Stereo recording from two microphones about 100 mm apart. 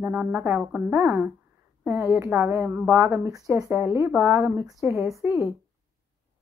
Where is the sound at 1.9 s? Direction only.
20° right (ahead or behind).